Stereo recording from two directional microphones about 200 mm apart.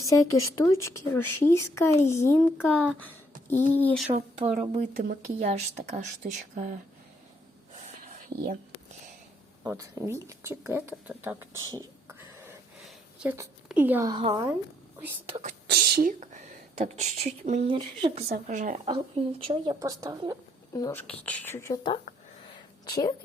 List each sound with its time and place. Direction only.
0.1 s speech: 15° left (ahead or behind)
4.1 s a woman's voice: 35° right (ahead or behind)
8.3 s a woman's voice: 30° right (ahead or behind)
9.6 s speech: 15° right (ahead or behind)
13.2 s speech: 15° right (ahead or behind)
14.1 s speech: 25° right (ahead or behind)
15.6 s speech: 55° right (ahead or behind); by 18.3 s 30° right (ahead or behind)
18.4 s a woman's voice: 40° right (ahead or behind)
18.9 s speech: 25° right (ahead or behind)
20.7 s speech: 15° left (ahead or behind)
22.5 s a sound: 20° left (ahead or behind)